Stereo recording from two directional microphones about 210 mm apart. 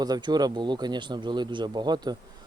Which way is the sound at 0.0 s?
20° right (ahead or behind).